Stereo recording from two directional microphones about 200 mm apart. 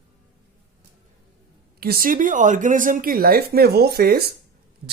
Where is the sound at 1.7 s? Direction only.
50° right (ahead or behind).